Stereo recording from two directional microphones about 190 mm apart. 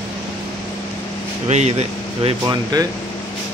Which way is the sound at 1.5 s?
35° right (ahead or behind).